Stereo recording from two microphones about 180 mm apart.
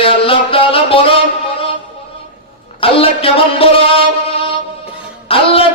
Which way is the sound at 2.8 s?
30° left (ahead or behind).